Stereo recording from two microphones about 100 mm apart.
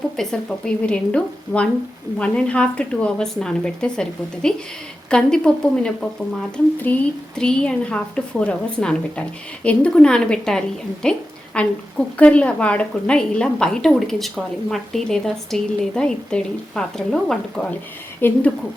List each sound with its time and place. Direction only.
0.2 s a woman's voice: 5° left (ahead or behind)
18.2 s speech: 20° left (ahead or behind)